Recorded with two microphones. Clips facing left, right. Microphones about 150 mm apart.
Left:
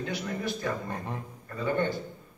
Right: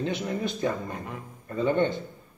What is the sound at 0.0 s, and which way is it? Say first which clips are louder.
A man's voice: right 4 dB; 20° right (ahead or behind).